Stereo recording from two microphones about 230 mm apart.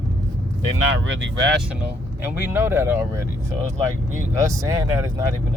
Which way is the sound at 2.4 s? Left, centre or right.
Centre.